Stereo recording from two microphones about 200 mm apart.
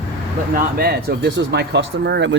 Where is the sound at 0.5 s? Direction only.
50° right (ahead or behind).